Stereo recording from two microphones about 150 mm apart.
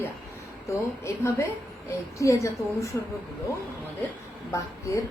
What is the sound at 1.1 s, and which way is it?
Speech, 20° left (ahead or behind).